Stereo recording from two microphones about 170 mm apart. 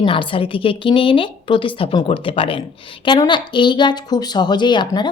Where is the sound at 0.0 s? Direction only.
30° left (ahead or behind).